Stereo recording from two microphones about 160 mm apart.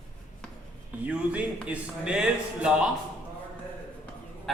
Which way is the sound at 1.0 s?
10° right (ahead or behind).